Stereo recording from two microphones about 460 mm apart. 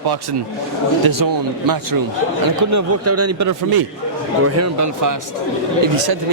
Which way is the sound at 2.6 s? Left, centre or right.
Right.